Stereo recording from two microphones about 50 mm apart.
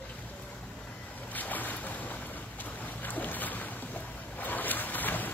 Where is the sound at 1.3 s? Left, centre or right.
Left.